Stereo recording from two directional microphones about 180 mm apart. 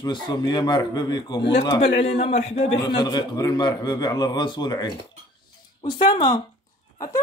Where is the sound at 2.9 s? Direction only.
25° left (ahead or behind).